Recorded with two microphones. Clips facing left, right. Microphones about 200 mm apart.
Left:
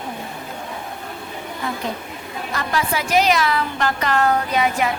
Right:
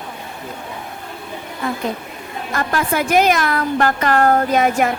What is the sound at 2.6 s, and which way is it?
A woman's voice, 50° right (ahead or behind).